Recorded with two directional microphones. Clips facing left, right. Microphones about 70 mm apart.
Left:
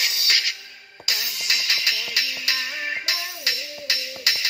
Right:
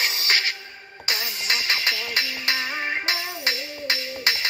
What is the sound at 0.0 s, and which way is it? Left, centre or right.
Music, right.